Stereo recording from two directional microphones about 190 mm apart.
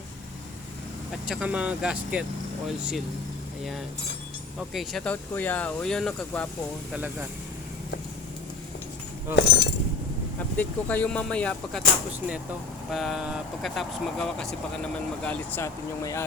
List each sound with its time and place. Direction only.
1.3 s speech: 5° right (ahead or behind)
4.7 s speech: centre (ahead or behind)
6.9 s speech: 10° right (ahead or behind)
9.3 s speech: 60° left (ahead or behind)
10.6 s speech: 10° left (ahead or behind)
12.9 s speech: centre (ahead or behind)